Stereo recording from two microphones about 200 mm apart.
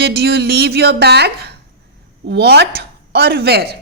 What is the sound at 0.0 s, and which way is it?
A woman's voice, 55° right (ahead or behind).